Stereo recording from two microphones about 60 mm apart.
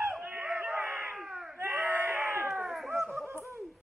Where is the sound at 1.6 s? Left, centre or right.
Right.